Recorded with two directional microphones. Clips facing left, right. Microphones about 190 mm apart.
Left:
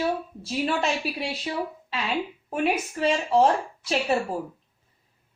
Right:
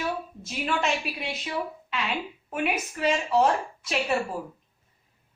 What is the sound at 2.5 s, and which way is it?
A woman's voice, 30° left (ahead or behind).